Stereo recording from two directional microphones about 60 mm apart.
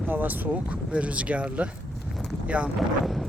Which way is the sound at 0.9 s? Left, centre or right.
Centre.